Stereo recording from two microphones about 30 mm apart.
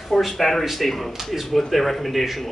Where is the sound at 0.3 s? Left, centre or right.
Centre.